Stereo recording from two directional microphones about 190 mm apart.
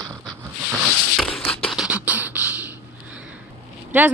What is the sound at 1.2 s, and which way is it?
Beatboxing, 5° left (ahead or behind).